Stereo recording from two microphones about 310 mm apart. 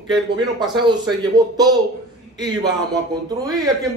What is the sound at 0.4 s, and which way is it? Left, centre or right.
A woman's voice, centre.